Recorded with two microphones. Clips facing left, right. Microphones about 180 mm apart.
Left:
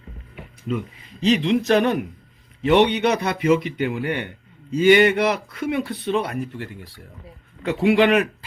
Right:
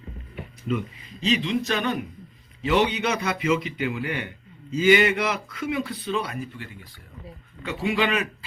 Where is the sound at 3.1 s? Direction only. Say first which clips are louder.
Left 5 dB; 35° left (ahead or behind).